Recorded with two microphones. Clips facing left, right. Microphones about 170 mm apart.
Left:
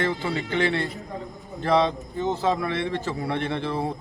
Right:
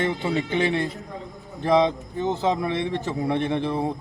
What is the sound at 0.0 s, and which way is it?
A man's voice, 20° right (ahead or behind).